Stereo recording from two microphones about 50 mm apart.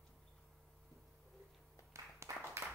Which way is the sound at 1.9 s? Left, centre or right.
Right.